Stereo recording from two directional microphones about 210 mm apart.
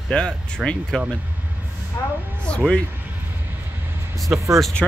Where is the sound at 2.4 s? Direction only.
5° left (ahead or behind).